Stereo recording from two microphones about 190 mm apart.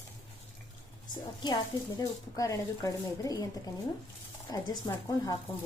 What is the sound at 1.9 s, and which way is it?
Speech, 20° left (ahead or behind).